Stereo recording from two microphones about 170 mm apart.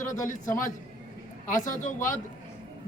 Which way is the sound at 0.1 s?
50° left (ahead or behind).